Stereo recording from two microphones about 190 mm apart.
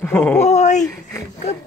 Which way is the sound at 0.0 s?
10° left (ahead or behind).